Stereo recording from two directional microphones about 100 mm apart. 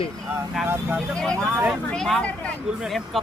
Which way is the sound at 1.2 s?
5° left (ahead or behind).